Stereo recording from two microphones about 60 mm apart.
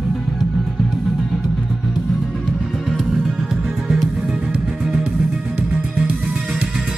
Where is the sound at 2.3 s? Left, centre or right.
Centre.